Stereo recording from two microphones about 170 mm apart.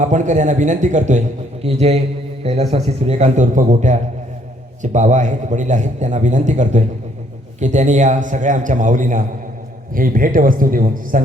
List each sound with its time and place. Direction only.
0.0 s a man's voice: 45° right (ahead or behind)